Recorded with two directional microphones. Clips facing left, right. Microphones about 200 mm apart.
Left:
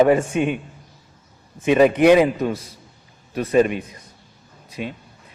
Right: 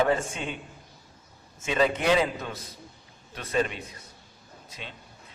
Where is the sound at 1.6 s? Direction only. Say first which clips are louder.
Left 11 dB; 15° left (ahead or behind).